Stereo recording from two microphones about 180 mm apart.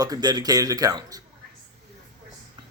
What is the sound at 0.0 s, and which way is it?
A man's voice, 20° right (ahead or behind).